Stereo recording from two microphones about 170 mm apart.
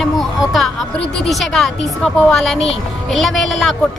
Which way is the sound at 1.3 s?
Centre (ahead or behind).